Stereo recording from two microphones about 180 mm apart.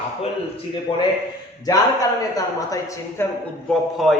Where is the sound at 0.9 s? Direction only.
30° left (ahead or behind).